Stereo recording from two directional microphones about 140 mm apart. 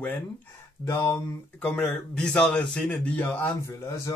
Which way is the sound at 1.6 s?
5° left (ahead or behind).